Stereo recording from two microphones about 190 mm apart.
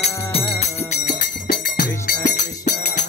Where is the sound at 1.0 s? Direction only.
55° left (ahead or behind).